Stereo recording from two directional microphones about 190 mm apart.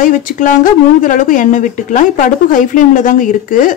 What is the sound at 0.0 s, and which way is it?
Speech, 45° left (ahead or behind).